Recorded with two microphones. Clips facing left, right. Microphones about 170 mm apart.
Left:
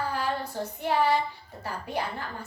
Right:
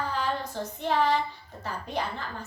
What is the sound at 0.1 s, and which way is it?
Child singing, 10° left (ahead or behind).